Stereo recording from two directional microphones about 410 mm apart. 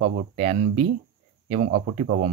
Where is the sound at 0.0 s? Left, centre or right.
Centre.